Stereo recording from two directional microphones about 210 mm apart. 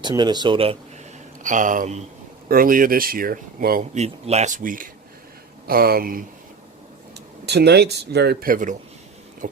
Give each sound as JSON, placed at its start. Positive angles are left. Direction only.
{"t": 0.0, "sound": "speech", "side_deg": -20}
{"t": 1.5, "sound": "speech", "side_deg": -35}
{"t": 7.4, "sound": "speech", "side_deg": -50}